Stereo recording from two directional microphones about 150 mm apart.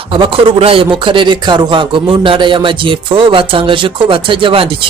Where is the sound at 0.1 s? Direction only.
35° right (ahead or behind).